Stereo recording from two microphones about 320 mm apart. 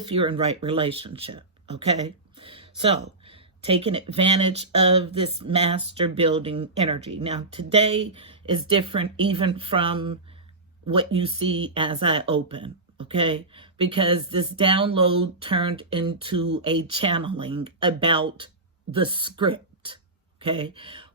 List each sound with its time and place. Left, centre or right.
0.0 s speech: centre